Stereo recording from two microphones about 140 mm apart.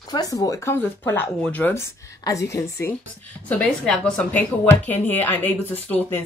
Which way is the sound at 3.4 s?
5° left (ahead or behind).